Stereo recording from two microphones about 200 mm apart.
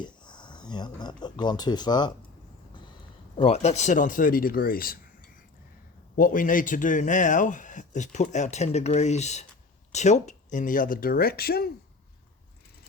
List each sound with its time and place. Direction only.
0.0 s speech: 20° left (ahead or behind)
3.3 s speech: 30° left (ahead or behind); by 4.9 s 45° left (ahead or behind)
6.1 s speech: 45° left (ahead or behind)